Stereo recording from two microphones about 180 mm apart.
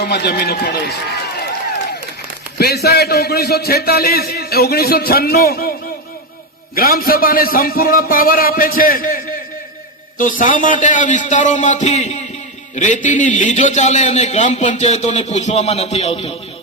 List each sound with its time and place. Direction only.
0.0 s a man's voice: 65° left (ahead or behind)
2.6 s a man's voice: 60° left (ahead or behind)
6.7 s a man's voice: 55° left (ahead or behind); by 16.3 s 35° left (ahead or behind)